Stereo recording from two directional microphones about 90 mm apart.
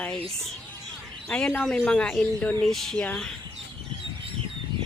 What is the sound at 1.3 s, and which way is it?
Speech, 10° left (ahead or behind).